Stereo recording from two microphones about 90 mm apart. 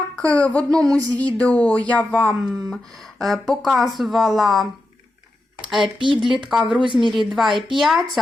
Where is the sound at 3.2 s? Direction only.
Centre (ahead or behind).